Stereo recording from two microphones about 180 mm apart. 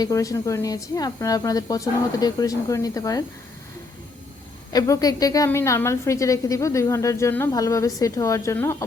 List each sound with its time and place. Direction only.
0.0 s speech: 20° left (ahead or behind)
4.7 s a woman's voice: 20° left (ahead or behind)